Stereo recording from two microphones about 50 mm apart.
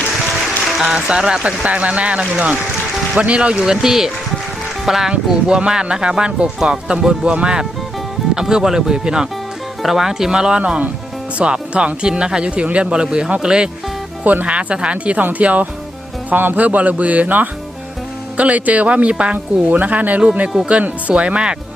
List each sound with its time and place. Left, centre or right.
0.6 s music: centre
0.9 s speech: centre
1.5 s speech: right
3.6 s speech: centre; by 15.6 s right
16.3 s speech: right
19.6 s speech: right